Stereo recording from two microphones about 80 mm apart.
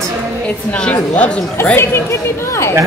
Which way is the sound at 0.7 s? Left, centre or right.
Centre.